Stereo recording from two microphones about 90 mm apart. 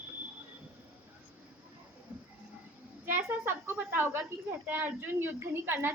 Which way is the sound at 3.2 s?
25° right (ahead or behind).